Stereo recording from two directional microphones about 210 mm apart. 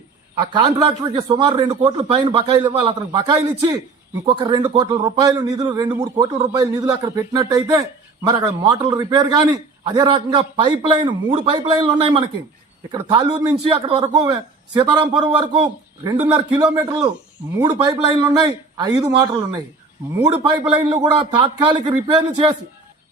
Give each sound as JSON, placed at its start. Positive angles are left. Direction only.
{"t": 0.3, "sound": "a man's voice", "side_deg": -20}
{"t": 20.3, "sound": "a man's voice", "side_deg": -20}